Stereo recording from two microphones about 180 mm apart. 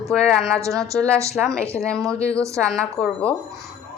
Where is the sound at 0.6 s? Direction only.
15° right (ahead or behind).